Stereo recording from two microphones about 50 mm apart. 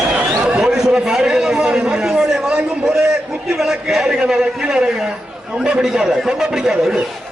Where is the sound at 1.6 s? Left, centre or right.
Centre.